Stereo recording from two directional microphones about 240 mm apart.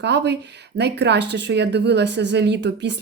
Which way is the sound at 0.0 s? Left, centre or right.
Right.